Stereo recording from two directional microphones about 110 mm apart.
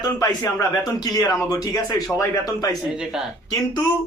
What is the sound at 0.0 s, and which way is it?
A man's voice, 35° left (ahead or behind).